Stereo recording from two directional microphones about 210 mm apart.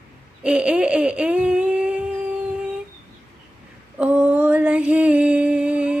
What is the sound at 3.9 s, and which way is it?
Mantra, 5° right (ahead or behind).